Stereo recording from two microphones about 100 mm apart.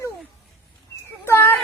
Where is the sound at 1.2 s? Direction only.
25° left (ahead or behind).